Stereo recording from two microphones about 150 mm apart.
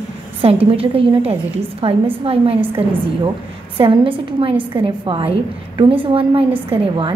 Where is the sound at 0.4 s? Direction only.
40° right (ahead or behind).